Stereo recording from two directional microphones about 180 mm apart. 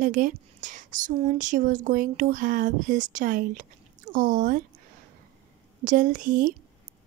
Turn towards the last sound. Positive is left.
turn(degrees=-45)  # may be behind; listen again after turning